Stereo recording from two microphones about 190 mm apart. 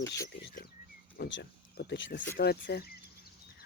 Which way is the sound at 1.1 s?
60° left (ahead or behind).